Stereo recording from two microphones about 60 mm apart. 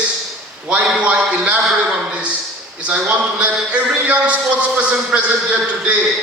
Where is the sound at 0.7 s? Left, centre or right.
Right.